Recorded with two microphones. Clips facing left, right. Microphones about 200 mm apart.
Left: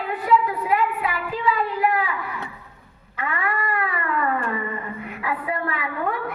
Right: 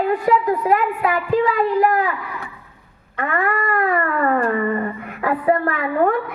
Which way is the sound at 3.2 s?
45° right (ahead or behind).